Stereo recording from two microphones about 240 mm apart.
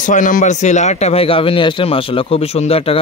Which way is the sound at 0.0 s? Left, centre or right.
Left.